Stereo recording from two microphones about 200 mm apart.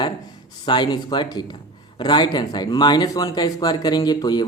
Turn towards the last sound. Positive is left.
turn(degrees=20)  # may be behind; listen again after turning